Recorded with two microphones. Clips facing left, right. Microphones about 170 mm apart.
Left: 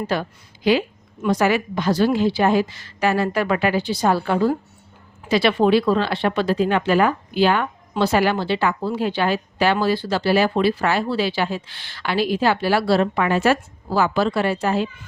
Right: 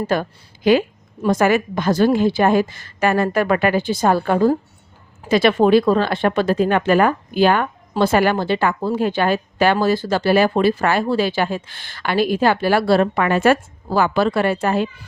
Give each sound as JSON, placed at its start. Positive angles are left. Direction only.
{"t": 0.1, "sound": "speech", "side_deg": -50}